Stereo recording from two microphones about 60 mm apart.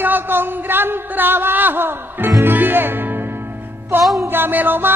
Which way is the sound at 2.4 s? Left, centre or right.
Right.